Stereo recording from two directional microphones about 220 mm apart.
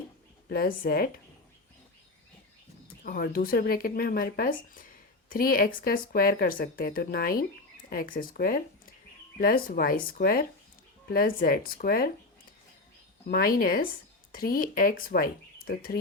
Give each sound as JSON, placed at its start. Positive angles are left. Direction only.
{"t": 0.4, "sound": "a woman's voice", "side_deg": 45}
{"t": 3.0, "sound": "speech", "side_deg": 40}
{"t": 13.2, "sound": "a woman's voice", "side_deg": 45}